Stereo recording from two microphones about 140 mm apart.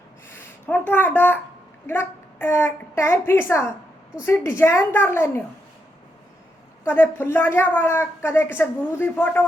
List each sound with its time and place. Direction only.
0.3 s a woman's voice: 15° left (ahead or behind)
6.8 s a woman's voice: 15° left (ahead or behind)